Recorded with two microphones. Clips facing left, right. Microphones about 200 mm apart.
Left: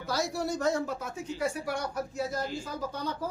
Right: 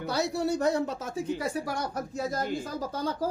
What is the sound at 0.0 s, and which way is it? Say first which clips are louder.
Speech: right 3 dB; 65° right (ahead or behind).